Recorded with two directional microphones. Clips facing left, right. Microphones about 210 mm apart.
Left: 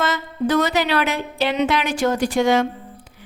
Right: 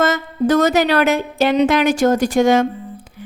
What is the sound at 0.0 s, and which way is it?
Speech, 45° right (ahead or behind).